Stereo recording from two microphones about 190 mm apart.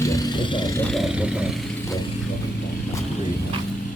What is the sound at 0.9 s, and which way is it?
Vehicle, 5° right (ahead or behind).